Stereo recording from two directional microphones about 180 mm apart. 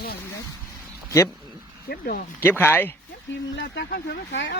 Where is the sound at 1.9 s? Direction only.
55° left (ahead or behind).